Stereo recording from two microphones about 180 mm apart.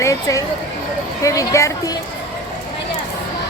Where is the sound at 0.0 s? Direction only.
15° left (ahead or behind).